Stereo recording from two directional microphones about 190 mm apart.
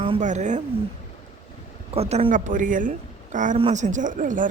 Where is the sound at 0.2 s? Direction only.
40° right (ahead or behind).